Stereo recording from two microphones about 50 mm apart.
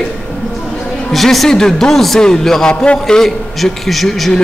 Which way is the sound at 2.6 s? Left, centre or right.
Left.